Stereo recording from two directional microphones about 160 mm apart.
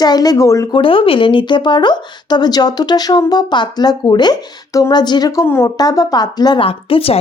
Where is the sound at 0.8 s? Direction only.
35° left (ahead or behind).